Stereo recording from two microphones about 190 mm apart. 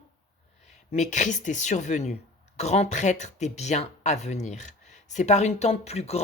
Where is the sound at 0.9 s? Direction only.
40° left (ahead or behind).